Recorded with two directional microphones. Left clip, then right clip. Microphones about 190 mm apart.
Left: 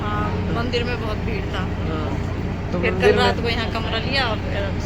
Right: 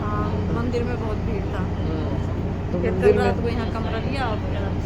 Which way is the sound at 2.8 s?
45° right (ahead or behind).